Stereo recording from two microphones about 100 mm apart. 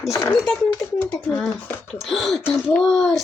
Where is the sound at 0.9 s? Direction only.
15° left (ahead or behind).